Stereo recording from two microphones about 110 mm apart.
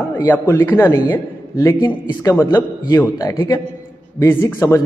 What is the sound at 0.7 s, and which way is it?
Speech, 35° left (ahead or behind).